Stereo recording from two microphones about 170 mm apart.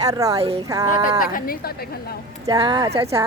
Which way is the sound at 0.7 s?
20° right (ahead or behind).